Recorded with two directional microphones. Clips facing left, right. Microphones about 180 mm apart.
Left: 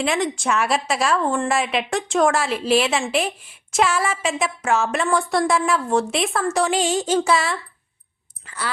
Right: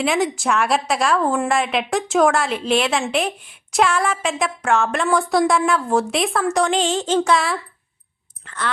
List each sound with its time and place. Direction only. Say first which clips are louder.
0.0 s a woman's voice: right 2 dB; centre (ahead or behind)